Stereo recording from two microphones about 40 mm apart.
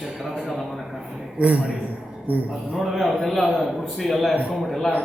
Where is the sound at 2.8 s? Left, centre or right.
Centre.